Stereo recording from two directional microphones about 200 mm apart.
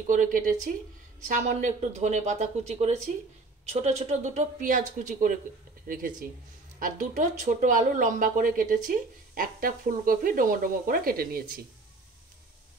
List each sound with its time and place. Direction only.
0.0 s speech: 40° right (ahead or behind)
6.8 s speech: 40° right (ahead or behind)